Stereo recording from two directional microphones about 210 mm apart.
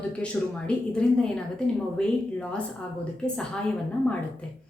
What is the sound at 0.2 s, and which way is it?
A woman's voice, 5° left (ahead or behind).